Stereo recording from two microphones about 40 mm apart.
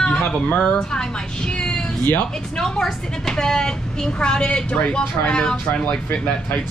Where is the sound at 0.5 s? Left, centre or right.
Left.